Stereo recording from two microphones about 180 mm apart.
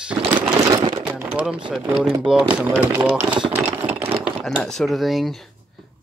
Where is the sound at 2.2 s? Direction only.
5° right (ahead or behind).